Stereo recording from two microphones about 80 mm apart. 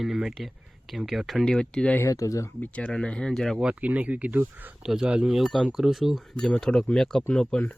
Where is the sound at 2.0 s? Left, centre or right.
Left.